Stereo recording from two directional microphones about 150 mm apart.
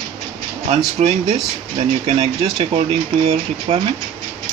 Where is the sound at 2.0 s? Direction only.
40° right (ahead or behind).